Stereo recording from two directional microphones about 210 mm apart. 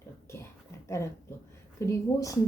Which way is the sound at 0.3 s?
10° left (ahead or behind).